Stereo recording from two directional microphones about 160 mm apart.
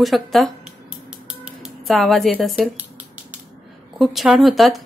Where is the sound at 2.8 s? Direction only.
10° right (ahead or behind).